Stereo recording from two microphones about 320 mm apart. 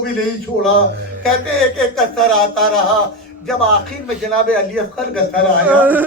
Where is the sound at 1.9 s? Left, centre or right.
Centre.